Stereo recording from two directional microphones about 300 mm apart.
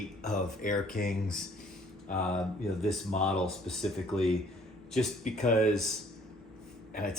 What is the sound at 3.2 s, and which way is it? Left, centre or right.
Speech, centre.